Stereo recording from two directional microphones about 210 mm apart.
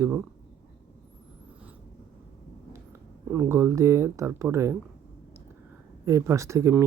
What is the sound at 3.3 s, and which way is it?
Speech, 10° right (ahead or behind).